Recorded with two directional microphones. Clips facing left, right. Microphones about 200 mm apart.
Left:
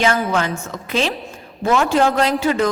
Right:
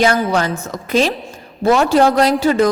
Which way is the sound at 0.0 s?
35° right (ahead or behind).